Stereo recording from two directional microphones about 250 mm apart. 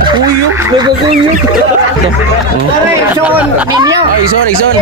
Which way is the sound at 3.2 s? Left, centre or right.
Centre.